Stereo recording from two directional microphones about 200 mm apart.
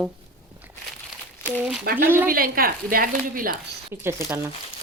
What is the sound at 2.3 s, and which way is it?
Speech, 45° right (ahead or behind).